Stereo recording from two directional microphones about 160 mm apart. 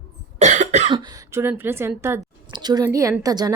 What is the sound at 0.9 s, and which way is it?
A woman's voice, 25° right (ahead or behind).